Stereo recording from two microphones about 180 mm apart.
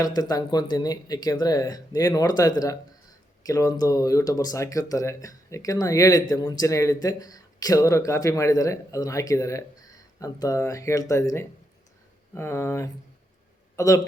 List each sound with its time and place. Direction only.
0.0 s a man's voice: 20° left (ahead or behind)